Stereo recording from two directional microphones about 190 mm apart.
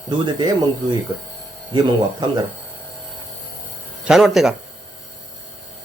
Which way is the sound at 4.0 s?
Centre (ahead or behind).